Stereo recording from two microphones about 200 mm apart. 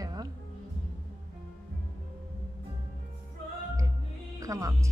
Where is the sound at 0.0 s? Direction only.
20° right (ahead or behind).